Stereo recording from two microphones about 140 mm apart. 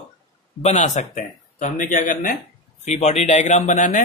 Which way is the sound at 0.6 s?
60° left (ahead or behind).